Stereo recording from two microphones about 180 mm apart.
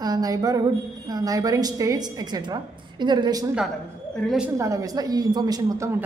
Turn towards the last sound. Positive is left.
turn(degrees=-15)  # may be behind; listen again after turning